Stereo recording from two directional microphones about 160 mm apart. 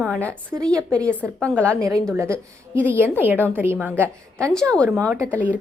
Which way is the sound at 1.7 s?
20° right (ahead or behind).